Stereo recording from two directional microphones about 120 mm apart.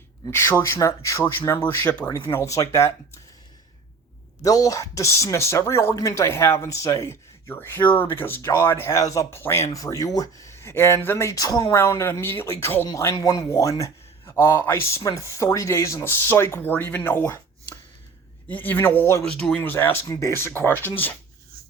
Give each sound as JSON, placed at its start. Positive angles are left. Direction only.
{"t": 0.3, "sound": "speech", "side_deg": 20}
{"t": 2.3, "sound": "speech", "side_deg": 25}
{"t": 4.4, "sound": "speech", "side_deg": 30}
{"t": 18.4, "sound": "speech", "side_deg": 15}
{"t": 19.2, "sound": "speech", "side_deg": 5}